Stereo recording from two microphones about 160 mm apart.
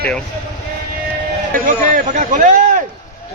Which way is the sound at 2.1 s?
55° right (ahead or behind).